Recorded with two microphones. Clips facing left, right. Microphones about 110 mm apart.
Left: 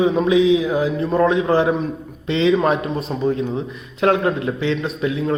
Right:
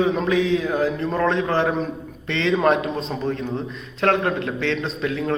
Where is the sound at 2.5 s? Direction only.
Centre (ahead or behind).